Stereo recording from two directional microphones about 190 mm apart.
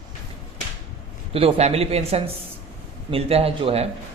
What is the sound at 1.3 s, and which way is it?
Speech, 30° right (ahead or behind).